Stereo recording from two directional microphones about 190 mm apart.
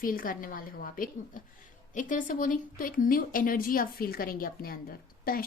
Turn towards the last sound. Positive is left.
turn(degrees=50)  # may be behind; listen again after turning